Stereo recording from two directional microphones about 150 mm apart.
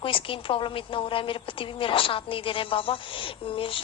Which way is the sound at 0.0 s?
35° left (ahead or behind).